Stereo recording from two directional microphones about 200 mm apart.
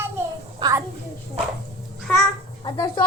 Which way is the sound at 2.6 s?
20° left (ahead or behind).